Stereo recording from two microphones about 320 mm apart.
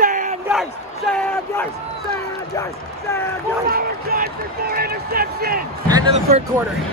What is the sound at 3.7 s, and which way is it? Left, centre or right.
Speech, right.